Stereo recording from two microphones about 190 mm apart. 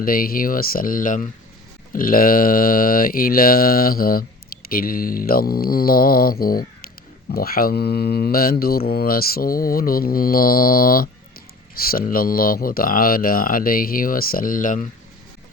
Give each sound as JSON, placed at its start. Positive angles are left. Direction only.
{"t": 0.0, "sound": "speech", "side_deg": 50}